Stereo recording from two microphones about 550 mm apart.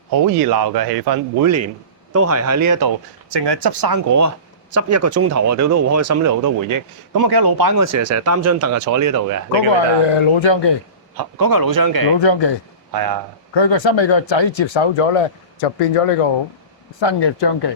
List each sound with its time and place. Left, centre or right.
0.5 s speech: right
9.6 s speech: left
11.2 s speech: right
12.2 s speech: left
12.9 s speech: right
13.5 s speech: left
17.0 s speech: left